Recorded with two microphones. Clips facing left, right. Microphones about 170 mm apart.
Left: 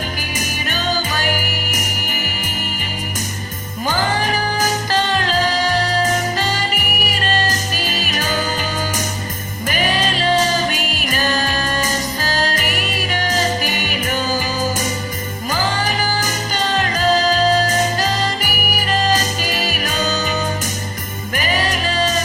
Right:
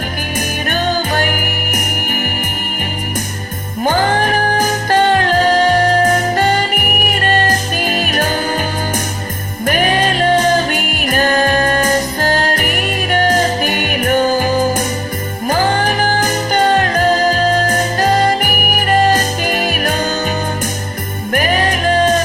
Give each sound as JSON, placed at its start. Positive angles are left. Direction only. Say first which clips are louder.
{"t": 0.3, "sound": "music", "louder": "right 8 dB", "side_deg": -60}
{"t": 3.8, "sound": "music", "louder": "right 5 dB", "side_deg": -55}
{"t": 9.6, "sound": "music", "louder": "right 5 dB", "side_deg": -55}
{"t": 21.3, "sound": "music", "louder": "right 5 dB", "side_deg": -55}